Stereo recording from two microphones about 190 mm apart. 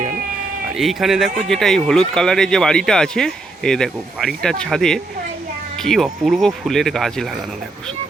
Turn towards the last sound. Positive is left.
turn(degrees=0)  # may be behind; listen again after turning